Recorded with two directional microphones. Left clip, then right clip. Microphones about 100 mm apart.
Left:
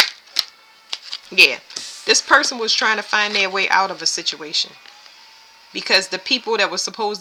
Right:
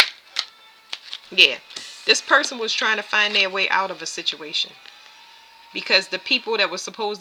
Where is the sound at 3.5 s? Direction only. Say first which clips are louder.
Left 4 dB; 15° left (ahead or behind).